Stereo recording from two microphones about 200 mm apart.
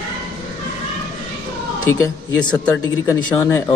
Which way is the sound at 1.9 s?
15° left (ahead or behind).